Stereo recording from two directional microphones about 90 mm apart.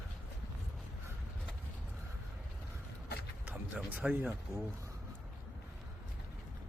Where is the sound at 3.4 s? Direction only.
15° right (ahead or behind).